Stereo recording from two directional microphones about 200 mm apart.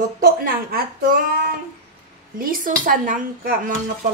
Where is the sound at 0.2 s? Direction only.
50° right (ahead or behind).